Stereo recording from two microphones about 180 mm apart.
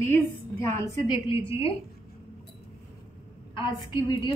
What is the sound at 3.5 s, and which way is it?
Speech, 25° left (ahead or behind).